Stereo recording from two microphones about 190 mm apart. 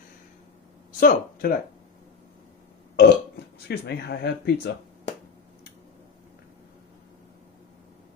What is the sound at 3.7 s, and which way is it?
Speech, 60° left (ahead or behind).